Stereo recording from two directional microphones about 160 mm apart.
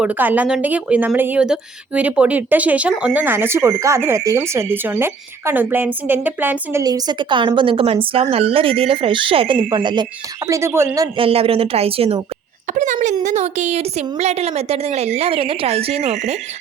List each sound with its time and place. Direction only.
0.0 s speech: 10° right (ahead or behind)
6.8 s a woman's voice: 25° right (ahead or behind)
11.2 s a woman's voice: 35° right (ahead or behind)
12.7 s a woman's voice: 50° right (ahead or behind)